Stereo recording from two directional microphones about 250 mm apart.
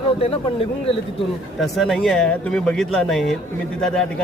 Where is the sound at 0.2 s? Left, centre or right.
Left.